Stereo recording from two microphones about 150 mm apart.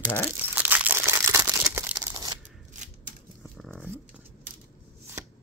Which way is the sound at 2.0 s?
25° right (ahead or behind).